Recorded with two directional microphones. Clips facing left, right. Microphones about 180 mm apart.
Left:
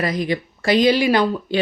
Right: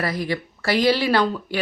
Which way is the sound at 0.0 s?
20° left (ahead or behind).